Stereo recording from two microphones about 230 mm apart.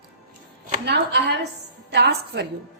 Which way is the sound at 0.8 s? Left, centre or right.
Right.